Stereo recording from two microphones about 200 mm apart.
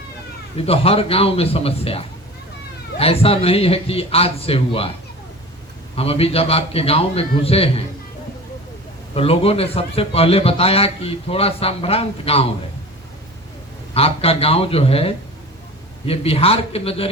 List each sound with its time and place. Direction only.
0.5 s a man's voice: 30° left (ahead or behind)
6.0 s a man's voice: 30° left (ahead or behind)
9.1 s a man's voice: 30° left (ahead or behind)
13.9 s a man's voice: 30° left (ahead or behind)